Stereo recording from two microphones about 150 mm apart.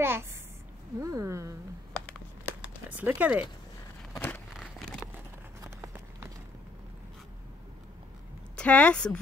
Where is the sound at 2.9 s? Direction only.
10° right (ahead or behind).